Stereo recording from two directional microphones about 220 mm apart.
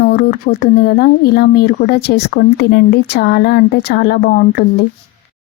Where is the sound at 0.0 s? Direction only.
45° left (ahead or behind).